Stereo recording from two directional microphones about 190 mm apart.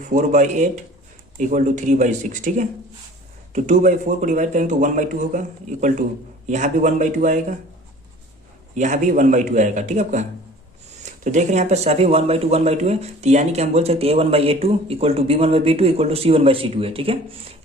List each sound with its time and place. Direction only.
0.0 s speech: 40° right (ahead or behind)
8.7 s speech: 40° right (ahead or behind)